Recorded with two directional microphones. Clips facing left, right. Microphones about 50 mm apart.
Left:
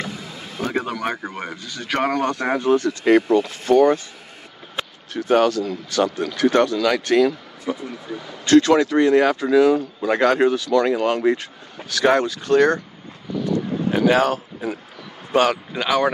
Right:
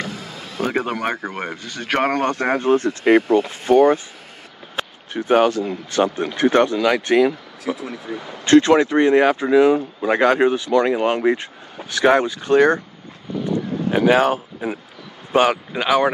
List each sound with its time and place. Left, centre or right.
0.6 s speech: right
5.1 s speech: right
7.6 s speech: right
8.3 s speech: right
13.8 s speech: centre